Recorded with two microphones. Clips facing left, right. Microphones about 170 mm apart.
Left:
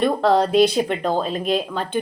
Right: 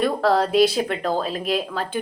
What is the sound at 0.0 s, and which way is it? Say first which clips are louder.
Speech: left 2 dB; 5° right (ahead or behind).